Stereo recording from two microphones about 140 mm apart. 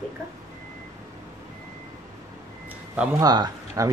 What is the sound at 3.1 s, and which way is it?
Speech, 30° right (ahead or behind).